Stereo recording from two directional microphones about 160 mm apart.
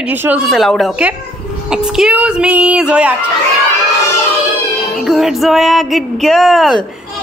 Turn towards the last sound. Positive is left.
turn(degrees=0)  # may be behind; listen again after turning